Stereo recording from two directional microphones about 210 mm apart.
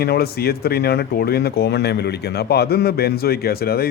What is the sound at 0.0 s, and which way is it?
Speech, 50° left (ahead or behind).